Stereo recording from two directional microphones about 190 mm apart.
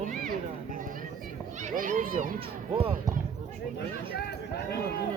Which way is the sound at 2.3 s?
30° right (ahead or behind).